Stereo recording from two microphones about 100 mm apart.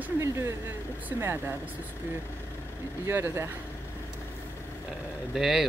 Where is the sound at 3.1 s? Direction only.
25° right (ahead or behind).